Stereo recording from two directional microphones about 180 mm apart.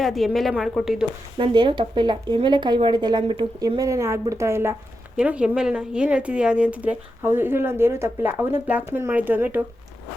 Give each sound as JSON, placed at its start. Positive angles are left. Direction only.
{"t": 0.0, "sound": "speech", "side_deg": 0}
{"t": 1.4, "sound": "a woman's voice", "side_deg": -25}